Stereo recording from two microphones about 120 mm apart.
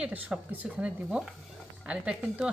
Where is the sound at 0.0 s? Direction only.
10° right (ahead or behind).